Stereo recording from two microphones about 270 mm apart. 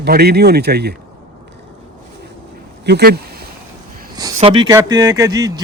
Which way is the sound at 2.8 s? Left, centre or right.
Right.